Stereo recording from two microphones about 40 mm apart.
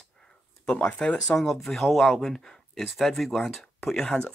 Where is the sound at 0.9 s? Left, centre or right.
Left.